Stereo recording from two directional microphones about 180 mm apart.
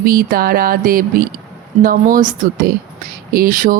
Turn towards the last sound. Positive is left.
turn(degrees=-50)  # may be behind; listen again after turning